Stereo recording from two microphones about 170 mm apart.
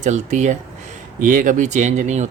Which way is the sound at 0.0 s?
45° right (ahead or behind).